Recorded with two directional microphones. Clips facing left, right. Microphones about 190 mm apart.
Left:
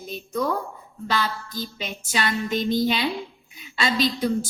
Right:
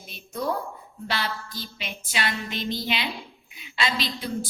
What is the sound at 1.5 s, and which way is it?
A woman's voice, 45° left (ahead or behind).